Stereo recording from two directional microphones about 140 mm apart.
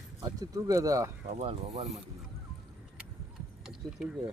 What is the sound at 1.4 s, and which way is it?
Speech, 50° right (ahead or behind).